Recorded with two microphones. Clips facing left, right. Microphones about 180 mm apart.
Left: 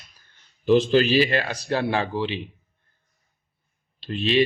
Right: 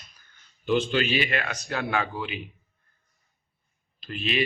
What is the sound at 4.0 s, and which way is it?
Speech, 30° left (ahead or behind).